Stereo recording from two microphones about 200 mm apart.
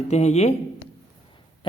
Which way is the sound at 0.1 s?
35° left (ahead or behind).